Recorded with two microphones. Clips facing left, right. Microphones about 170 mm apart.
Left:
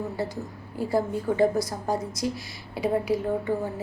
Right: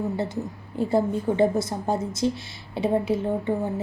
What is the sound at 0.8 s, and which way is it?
A woman's voice, 25° right (ahead or behind).